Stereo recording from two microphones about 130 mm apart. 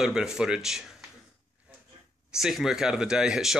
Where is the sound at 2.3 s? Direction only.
5° right (ahead or behind).